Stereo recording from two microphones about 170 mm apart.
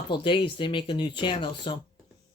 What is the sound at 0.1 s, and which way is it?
Speech, 30° left (ahead or behind).